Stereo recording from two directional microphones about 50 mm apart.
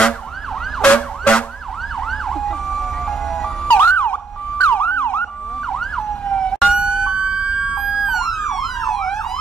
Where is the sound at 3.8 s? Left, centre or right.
Left.